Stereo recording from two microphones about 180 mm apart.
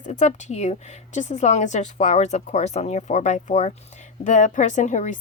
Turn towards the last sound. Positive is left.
turn(degrees=40)  # may be behind; listen again after turning